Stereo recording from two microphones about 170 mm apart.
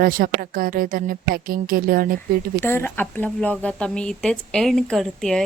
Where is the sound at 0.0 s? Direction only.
55° right (ahead or behind).